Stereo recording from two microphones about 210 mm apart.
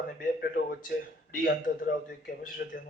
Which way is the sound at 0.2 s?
50° left (ahead or behind).